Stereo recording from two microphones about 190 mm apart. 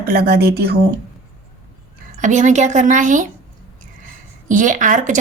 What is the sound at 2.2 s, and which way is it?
Speech, 40° right (ahead or behind).